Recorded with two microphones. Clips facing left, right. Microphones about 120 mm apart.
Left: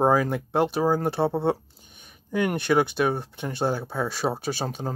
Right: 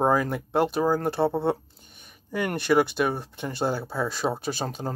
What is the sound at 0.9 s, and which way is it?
Speech, centre (ahead or behind).